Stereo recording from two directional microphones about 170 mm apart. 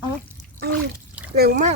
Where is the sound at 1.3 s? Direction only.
65° right (ahead or behind).